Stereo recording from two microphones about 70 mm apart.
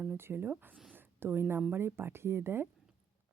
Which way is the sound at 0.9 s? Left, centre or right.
Right.